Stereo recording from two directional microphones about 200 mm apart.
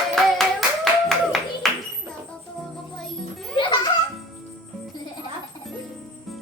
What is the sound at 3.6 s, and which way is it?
Music, 25° left (ahead or behind).